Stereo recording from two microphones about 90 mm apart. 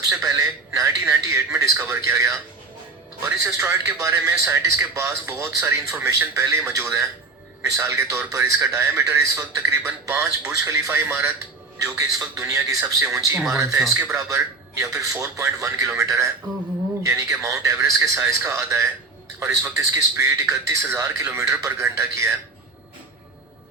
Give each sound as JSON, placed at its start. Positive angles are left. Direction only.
{"t": 0.1, "sound": "a man's voice", "side_deg": -35}
{"t": 3.4, "sound": "a man's voice", "side_deg": -35}